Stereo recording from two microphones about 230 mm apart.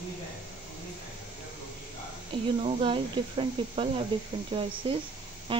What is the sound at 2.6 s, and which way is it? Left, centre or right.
Speech, right.